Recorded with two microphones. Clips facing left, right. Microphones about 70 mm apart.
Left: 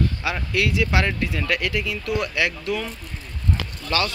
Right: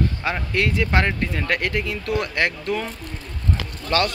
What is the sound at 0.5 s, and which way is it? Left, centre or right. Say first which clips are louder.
Speech: right 1 dB; right.